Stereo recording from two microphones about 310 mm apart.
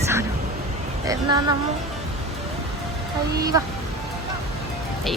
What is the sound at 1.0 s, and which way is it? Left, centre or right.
Speech, centre.